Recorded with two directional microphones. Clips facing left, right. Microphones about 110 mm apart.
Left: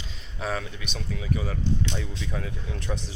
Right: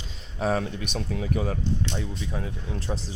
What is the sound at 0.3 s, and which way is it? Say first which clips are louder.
Speech: right 6 dB; 40° right (ahead or behind).